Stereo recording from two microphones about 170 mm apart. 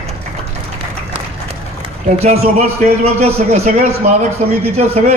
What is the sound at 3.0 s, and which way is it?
A man's voice, 40° right (ahead or behind).